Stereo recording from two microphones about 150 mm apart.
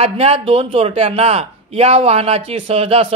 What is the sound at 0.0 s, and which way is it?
A man's voice, 40° right (ahead or behind).